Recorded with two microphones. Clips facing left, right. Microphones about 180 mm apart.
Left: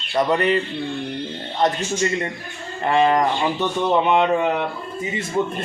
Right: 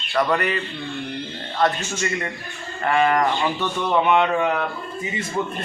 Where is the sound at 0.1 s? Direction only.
20° left (ahead or behind).